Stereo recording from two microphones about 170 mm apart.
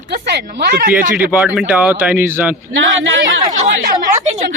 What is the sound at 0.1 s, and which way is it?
Speech, 75° right (ahead or behind).